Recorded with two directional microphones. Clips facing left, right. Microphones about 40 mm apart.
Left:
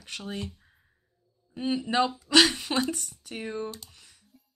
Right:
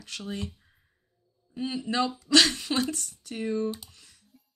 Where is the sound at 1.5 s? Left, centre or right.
Centre.